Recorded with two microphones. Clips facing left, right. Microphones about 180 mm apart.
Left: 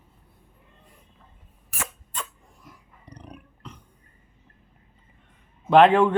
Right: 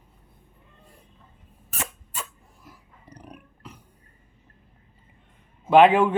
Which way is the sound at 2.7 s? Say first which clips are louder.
Even; 5° right (ahead or behind).